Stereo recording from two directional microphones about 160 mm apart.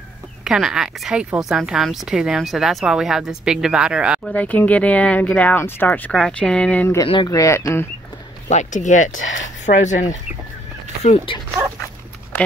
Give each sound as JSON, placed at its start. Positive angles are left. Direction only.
{"t": 0.4, "sound": "speech", "side_deg": -5}
{"t": 4.3, "sound": "speech", "side_deg": 10}
{"t": 7.1, "sound": "speech", "side_deg": 25}
{"t": 8.5, "sound": "speech", "side_deg": 50}
{"t": 11.1, "sound": "speech", "side_deg": 35}
{"t": 11.8, "sound": "dog", "side_deg": 10}